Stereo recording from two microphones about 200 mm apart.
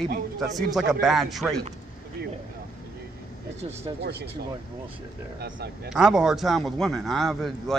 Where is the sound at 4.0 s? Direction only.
55° right (ahead or behind).